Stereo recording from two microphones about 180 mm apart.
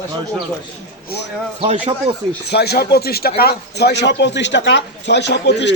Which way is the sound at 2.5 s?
60° left (ahead or behind).